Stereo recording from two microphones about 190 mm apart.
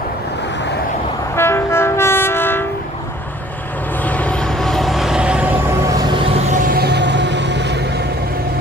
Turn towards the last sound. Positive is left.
turn(degrees=-65)  # may be behind; listen again after turning